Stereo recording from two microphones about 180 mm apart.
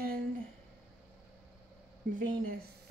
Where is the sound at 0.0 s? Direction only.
55° right (ahead or behind).